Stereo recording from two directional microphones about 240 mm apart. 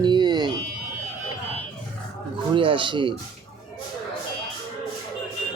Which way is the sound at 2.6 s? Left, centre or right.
Right.